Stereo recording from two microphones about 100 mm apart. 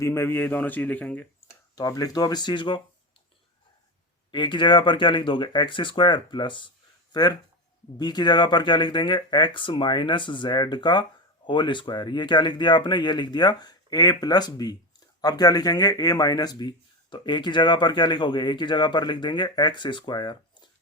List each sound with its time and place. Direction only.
0.0 s a man's voice: 25° left (ahead or behind)
1.7 s speech: 40° left (ahead or behind)
4.3 s speech: 50° left (ahead or behind)